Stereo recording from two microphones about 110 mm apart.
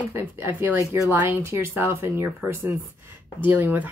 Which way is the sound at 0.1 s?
20° right (ahead or behind).